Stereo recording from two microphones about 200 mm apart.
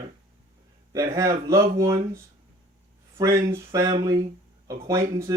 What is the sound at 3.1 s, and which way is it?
Speech, 15° right (ahead or behind).